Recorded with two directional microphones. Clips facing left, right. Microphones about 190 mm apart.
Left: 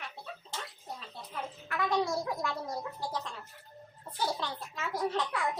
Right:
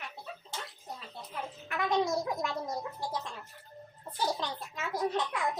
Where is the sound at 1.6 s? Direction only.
20° right (ahead or behind).